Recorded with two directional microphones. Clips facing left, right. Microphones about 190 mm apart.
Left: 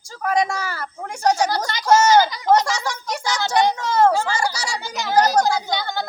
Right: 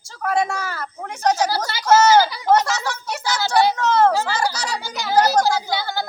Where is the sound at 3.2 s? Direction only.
5° right (ahead or behind).